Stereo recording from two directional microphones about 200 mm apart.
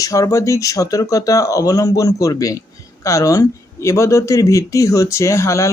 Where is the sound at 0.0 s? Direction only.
15° left (ahead or behind).